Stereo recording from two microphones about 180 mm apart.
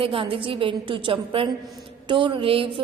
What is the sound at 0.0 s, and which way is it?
A woman's voice, 30° right (ahead or behind).